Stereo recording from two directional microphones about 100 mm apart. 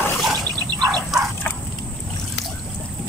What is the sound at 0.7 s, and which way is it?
Dog, 40° right (ahead or behind).